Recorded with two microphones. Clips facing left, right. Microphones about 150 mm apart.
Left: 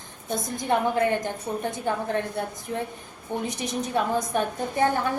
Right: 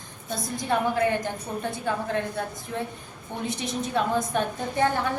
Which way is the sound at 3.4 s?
15° left (ahead or behind).